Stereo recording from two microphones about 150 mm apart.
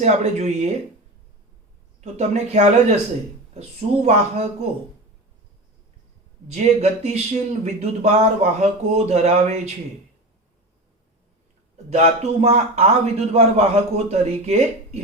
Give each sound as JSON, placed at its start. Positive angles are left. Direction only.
{"t": 0.0, "sound": "speech", "side_deg": -50}
{"t": 2.0, "sound": "speech", "side_deg": -50}
{"t": 6.5, "sound": "speech", "side_deg": -50}
{"t": 11.9, "sound": "speech", "side_deg": -45}